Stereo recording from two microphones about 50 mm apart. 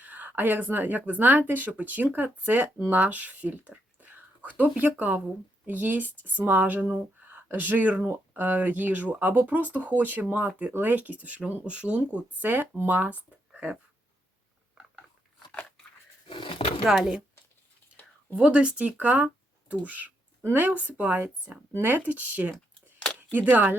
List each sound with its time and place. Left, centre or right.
0.0 s speech: right
14.8 s dog: centre
16.8 s speech: centre
18.3 s speech: right
21.7 s speech: right